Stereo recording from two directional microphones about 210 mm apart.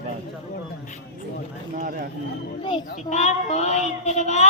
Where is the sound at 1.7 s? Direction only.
40° right (ahead or behind).